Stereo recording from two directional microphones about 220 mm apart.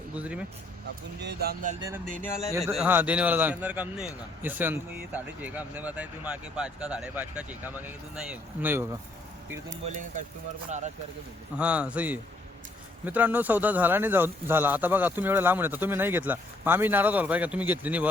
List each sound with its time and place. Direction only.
0.2 s a man's voice: 5° right (ahead or behind)
1.2 s speech: 50° right (ahead or behind)
2.2 s speech: 10° left (ahead or behind)
2.6 s a man's voice: 10° right (ahead or behind)
11.5 s a man's voice: 5° right (ahead or behind)